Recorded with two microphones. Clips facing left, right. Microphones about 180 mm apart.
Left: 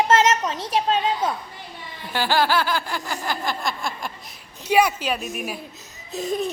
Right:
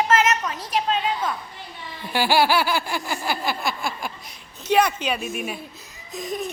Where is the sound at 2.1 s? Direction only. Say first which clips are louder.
Right 1 dB; 10° right (ahead or behind).